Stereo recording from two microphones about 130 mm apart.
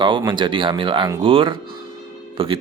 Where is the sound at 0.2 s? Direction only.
35° right (ahead or behind).